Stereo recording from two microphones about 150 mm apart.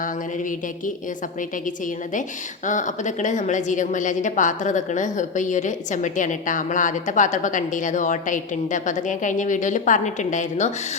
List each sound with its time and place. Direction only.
2.6 s a woman's voice: 55° left (ahead or behind)